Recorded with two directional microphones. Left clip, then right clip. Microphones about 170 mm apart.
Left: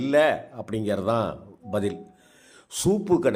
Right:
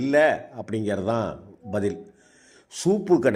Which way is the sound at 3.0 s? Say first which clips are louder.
Right 3 dB; 5° right (ahead or behind).